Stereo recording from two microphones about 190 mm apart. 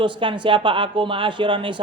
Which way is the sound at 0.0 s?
25° right (ahead or behind).